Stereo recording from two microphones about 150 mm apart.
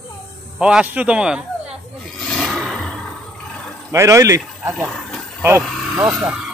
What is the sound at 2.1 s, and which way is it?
Roar, centre (ahead or behind).